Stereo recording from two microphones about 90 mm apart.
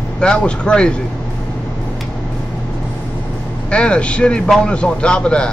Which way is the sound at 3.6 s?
10° left (ahead or behind).